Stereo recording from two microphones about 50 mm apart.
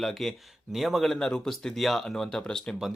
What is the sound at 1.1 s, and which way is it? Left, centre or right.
Speech, centre.